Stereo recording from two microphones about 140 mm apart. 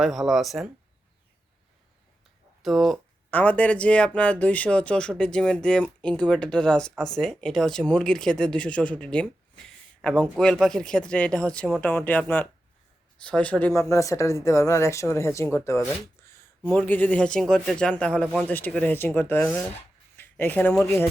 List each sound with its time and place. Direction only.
0.0 s speech: centre (ahead or behind)
2.6 s speech: centre (ahead or behind); by 19.5 s 15° left (ahead or behind)
20.1 s a sound: 15° left (ahead or behind)
20.8 s speech: 15° left (ahead or behind)